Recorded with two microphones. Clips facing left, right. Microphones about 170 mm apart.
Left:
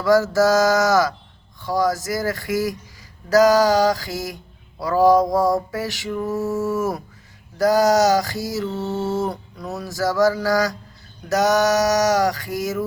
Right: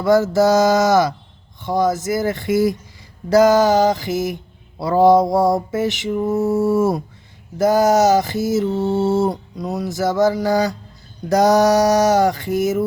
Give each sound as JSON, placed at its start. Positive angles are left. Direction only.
{"t": 0.0, "sound": "mantra", "side_deg": -20}
{"t": 8.7, "sound": "mantra", "side_deg": -10}
{"t": 9.0, "sound": "mantra", "side_deg": -30}
{"t": 11.3, "sound": "a sound", "side_deg": -35}